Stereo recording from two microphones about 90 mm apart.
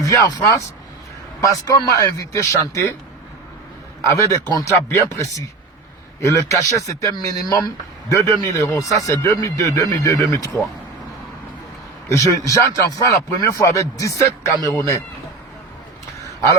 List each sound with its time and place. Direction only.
0.0 s speech: 35° left (ahead or behind)
4.0 s speech: 35° left (ahead or behind)
12.0 s speech: 35° left (ahead or behind)